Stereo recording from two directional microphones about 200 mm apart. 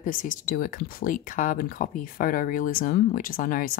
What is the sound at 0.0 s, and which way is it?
Speech, 40° left (ahead or behind).